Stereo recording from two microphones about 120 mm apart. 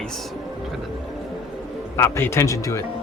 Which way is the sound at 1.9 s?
20° left (ahead or behind).